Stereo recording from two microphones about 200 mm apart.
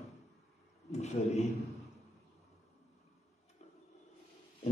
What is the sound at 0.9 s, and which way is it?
Speech, 35° left (ahead or behind).